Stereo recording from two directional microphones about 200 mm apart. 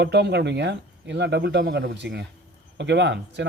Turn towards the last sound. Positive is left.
turn(degrees=-60)  # may be behind; listen again after turning